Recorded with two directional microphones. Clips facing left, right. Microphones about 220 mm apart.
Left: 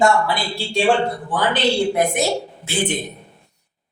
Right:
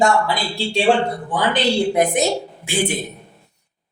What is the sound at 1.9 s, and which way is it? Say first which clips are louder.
Speech: right 2 dB; 15° right (ahead or behind).